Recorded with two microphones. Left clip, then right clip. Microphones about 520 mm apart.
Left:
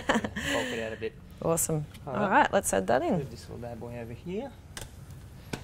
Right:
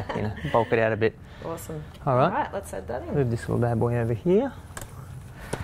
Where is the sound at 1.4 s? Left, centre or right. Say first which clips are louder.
Left 6 dB; left.